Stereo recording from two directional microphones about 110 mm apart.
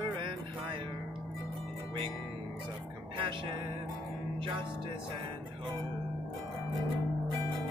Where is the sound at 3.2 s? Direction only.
45° right (ahead or behind).